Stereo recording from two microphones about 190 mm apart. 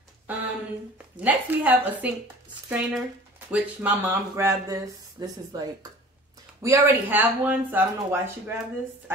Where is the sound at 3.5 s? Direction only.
10° right (ahead or behind).